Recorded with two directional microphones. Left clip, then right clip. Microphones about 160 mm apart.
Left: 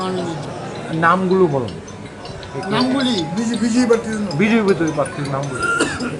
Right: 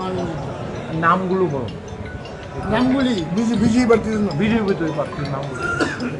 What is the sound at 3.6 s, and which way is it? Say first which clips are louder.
Speech: even; 75° right (ahead or behind).